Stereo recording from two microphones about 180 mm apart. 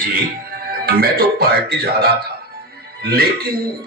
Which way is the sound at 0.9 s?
55° right (ahead or behind).